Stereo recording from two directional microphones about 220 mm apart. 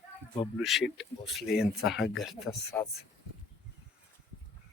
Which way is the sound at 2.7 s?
15° left (ahead or behind).